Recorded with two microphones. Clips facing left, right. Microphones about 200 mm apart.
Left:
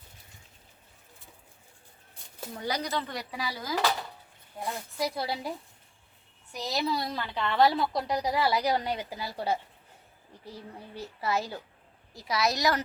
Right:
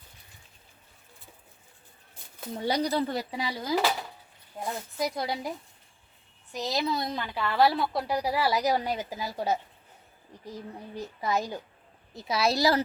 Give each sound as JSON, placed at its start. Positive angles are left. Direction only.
{"t": 2.6, "sound": "a woman's voice", "side_deg": -30}
{"t": 6.5, "sound": "speech", "side_deg": -20}
{"t": 7.3, "sound": "a woman's voice", "side_deg": -5}
{"t": 12.1, "sound": "speech", "side_deg": -30}